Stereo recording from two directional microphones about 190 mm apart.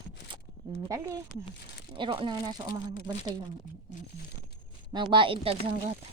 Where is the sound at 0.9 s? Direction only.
20° right (ahead or behind).